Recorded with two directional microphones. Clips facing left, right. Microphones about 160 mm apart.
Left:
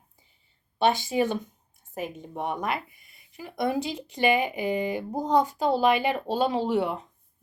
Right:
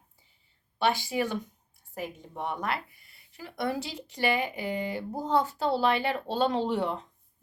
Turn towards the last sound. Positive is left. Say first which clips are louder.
# left 3 dB
turn(degrees=5)  # may be behind; listen again after turning